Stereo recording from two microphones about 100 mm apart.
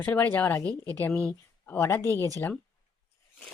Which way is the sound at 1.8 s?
25° left (ahead or behind).